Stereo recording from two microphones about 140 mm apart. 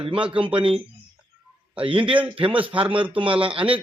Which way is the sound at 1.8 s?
40° right (ahead or behind).